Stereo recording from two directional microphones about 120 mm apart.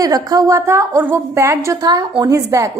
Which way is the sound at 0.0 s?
30° right (ahead or behind).